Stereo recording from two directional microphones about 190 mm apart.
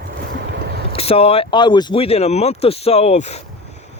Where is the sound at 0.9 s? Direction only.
30° left (ahead or behind).